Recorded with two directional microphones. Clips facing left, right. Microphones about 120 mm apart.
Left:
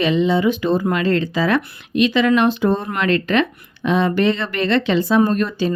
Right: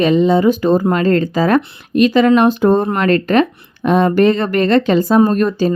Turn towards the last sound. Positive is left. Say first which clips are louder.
# right 4 dB
turn(degrees=-45)  # may be behind; listen again after turning